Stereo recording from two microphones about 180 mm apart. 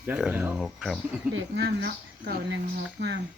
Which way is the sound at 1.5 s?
65° right (ahead or behind).